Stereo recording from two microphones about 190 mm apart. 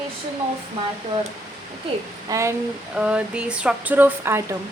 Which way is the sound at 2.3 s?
15° right (ahead or behind).